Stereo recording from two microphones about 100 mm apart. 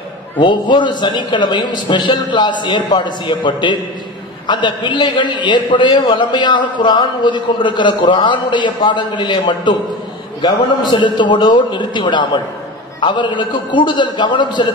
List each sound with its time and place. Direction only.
0.4 s a man's voice: 50° left (ahead or behind)